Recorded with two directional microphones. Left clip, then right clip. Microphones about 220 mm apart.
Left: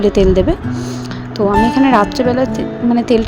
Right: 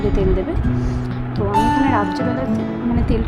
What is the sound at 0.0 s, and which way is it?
Speech, 35° left (ahead or behind).